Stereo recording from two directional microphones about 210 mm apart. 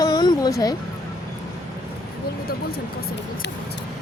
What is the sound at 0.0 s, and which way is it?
Music, 20° left (ahead or behind).